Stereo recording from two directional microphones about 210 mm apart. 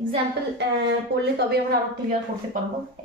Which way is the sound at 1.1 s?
50° right (ahead or behind).